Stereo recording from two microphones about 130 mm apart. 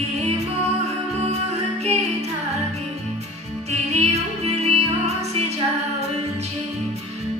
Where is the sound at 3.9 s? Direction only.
55° right (ahead or behind).